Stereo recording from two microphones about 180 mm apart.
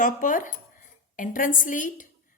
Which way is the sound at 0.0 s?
45° left (ahead or behind).